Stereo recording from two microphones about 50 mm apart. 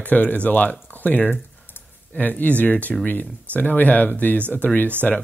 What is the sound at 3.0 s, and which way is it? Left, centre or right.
Speech, left.